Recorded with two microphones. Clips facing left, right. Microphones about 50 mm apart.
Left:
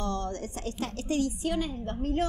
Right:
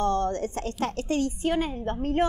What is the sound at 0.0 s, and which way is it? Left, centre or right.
A woman's voice, right.